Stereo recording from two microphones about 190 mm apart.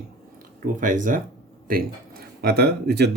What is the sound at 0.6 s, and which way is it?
Speech, 45° right (ahead or behind).